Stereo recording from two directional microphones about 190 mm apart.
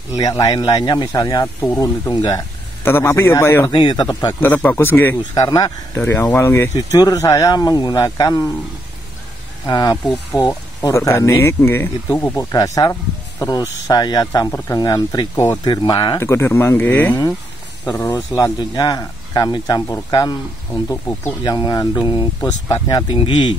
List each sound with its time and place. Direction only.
0.2 s speech: 20° left (ahead or behind)
4.4 s speech: 10° left (ahead or behind)
9.7 s speech: 20° left (ahead or behind)